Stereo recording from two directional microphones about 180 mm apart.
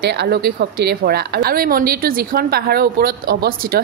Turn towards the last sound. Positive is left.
turn(degrees=-55)  # may be behind; listen again after turning